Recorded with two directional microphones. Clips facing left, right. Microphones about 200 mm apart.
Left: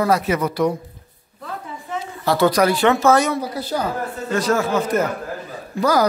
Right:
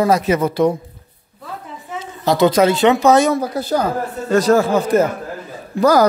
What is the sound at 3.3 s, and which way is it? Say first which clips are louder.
Speech: right 5 dB; 45° right (ahead or behind).